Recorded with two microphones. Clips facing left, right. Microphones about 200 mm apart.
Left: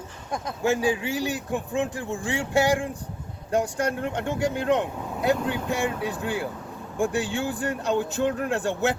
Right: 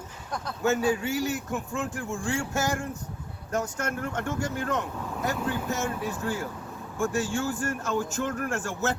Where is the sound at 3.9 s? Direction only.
20° left (ahead or behind).